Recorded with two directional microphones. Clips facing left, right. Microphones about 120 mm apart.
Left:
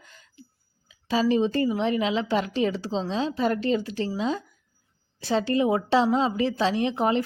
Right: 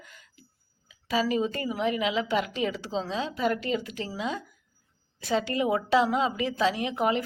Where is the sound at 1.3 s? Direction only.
30° left (ahead or behind).